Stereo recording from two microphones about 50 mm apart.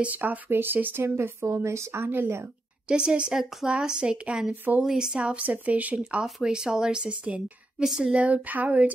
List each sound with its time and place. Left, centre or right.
0.0 s speech: right
0.9 s a woman's voice: right
2.9 s speech: centre
6.4 s speech: centre
8.1 s speech: right